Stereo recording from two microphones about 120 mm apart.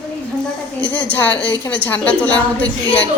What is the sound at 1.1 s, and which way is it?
A woman's voice, 15° left (ahead or behind).